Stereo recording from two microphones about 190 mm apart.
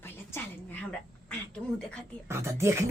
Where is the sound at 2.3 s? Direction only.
15° right (ahead or behind).